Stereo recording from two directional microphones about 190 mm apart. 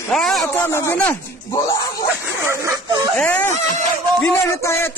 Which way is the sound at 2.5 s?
15° right (ahead or behind).